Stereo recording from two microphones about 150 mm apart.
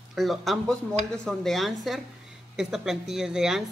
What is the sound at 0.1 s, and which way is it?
Speech, centre (ahead or behind).